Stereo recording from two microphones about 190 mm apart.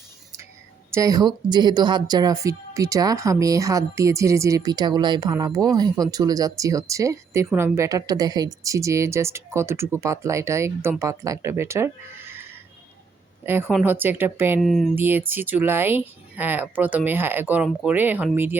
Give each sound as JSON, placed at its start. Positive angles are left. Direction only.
{"t": 0.9, "sound": "a woman's voice", "side_deg": -20}
{"t": 14.6, "sound": "speech", "side_deg": 0}
{"t": 14.9, "sound": "a woman's voice", "side_deg": -10}